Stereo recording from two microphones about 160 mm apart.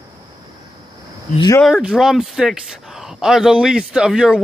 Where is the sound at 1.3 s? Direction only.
25° left (ahead or behind).